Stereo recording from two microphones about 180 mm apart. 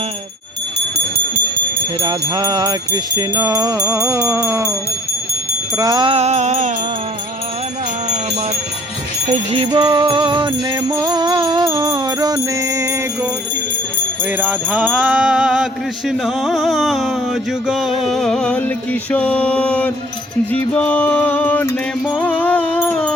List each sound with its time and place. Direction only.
2.0 s music: 25° right (ahead or behind)
5.7 s music: 20° right (ahead or behind); by 6.7 s 40° right (ahead or behind)
9.3 s music: 35° right (ahead or behind)
9.7 s music: 25° right (ahead or behind)
14.3 s a sound: 10° right (ahead or behind)
18.0 s music: centre (ahead or behind)